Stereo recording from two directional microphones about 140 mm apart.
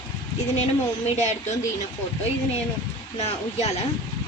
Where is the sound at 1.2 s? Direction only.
55° left (ahead or behind).